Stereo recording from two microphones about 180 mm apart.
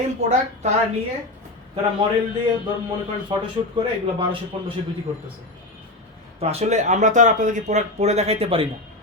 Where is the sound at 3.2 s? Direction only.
25° right (ahead or behind).